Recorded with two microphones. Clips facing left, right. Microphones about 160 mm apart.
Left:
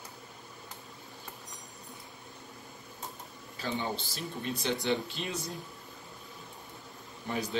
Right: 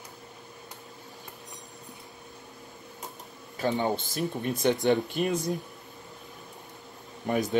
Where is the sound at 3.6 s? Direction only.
50° right (ahead or behind).